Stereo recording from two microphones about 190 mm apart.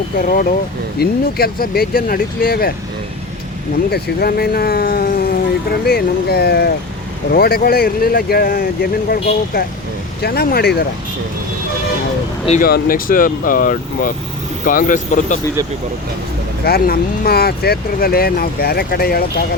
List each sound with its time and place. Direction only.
0.2 s speech: 50° left (ahead or behind)
3.9 s speech: 55° left (ahead or behind)
12.6 s speech: 50° left (ahead or behind)
16.6 s speech: 55° left (ahead or behind)